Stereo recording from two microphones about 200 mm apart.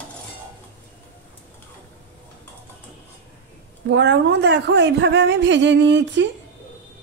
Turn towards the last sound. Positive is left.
turn(degrees=-60)  # may be behind; listen again after turning